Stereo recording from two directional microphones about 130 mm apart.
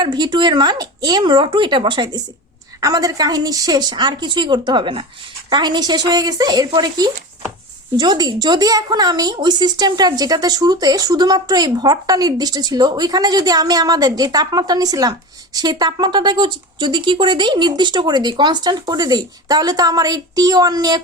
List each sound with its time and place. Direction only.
0.0 s speech: 35° right (ahead or behind)